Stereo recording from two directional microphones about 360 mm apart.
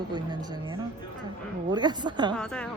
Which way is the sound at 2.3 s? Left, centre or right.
Centre.